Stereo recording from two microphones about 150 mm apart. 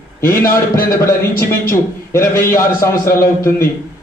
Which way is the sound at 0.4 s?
70° left (ahead or behind).